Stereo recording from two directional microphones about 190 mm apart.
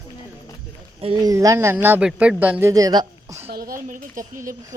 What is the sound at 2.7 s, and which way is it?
Speech, 20° right (ahead or behind).